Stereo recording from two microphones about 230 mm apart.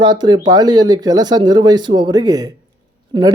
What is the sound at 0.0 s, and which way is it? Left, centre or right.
Speech, centre.